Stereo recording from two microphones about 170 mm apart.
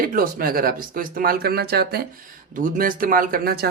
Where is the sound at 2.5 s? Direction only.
55° right (ahead or behind).